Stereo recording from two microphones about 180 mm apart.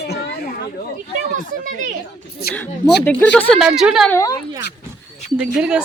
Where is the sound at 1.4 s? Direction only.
45° right (ahead or behind).